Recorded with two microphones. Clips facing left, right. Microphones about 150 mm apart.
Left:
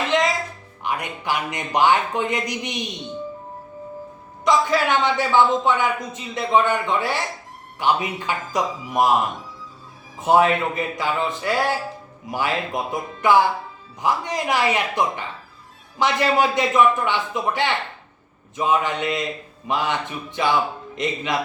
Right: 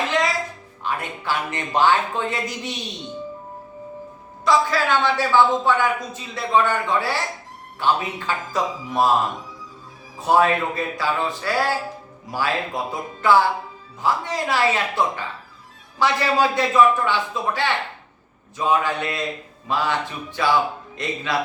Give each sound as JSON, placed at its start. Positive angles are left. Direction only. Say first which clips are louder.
{"t": 0.9, "sound": "speech", "louder": "left 1 dB", "side_deg": 15}
{"t": 4.4, "sound": "a man's voice", "louder": "even", "side_deg": 20}
{"t": 10.2, "sound": "a man's voice", "louder": "left 1 dB", "side_deg": 20}